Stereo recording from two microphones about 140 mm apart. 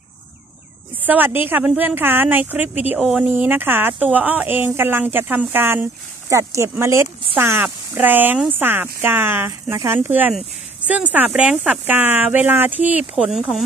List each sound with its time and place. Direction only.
1.0 s speech: 15° right (ahead or behind)
2.6 s speech: 50° left (ahead or behind)
3.0 s speech: centre (ahead or behind)
3.3 s a woman's voice: 15° right (ahead or behind)